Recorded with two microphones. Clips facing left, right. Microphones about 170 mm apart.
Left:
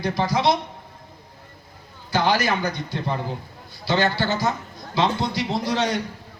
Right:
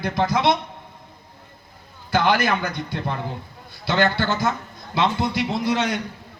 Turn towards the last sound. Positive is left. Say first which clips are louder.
# right 1 dB
turn(degrees=-55)  # may be behind; listen again after turning